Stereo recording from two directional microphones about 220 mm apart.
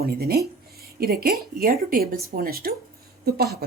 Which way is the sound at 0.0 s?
45° right (ahead or behind).